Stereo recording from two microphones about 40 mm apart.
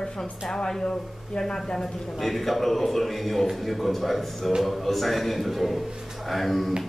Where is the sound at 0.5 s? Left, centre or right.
Centre.